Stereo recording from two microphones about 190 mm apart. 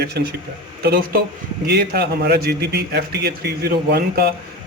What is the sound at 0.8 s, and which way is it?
A man's voice, 50° right (ahead or behind).